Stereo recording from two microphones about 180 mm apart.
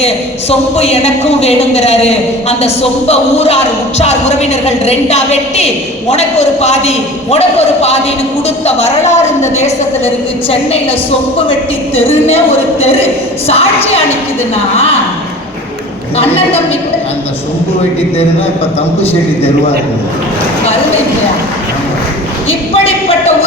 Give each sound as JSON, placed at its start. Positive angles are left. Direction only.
{"t": 0.8, "sound": "a woman's voice", "side_deg": 35}
{"t": 13.5, "sound": "a woman's voice", "side_deg": 35}
{"t": 16.1, "sound": "a woman's voice", "side_deg": 35}
{"t": 22.8, "sound": "a sound", "side_deg": 35}